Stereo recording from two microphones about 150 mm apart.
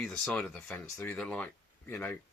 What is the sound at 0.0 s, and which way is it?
Speech, 5° left (ahead or behind).